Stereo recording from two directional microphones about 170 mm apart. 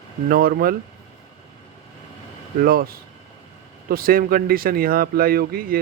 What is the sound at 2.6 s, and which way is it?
Speech, 60° right (ahead or behind).